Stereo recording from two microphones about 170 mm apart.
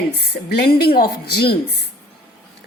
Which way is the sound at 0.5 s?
70° left (ahead or behind).